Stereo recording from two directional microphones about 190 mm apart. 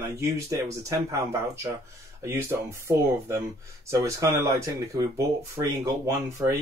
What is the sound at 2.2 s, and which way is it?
Speech, 15° right (ahead or behind).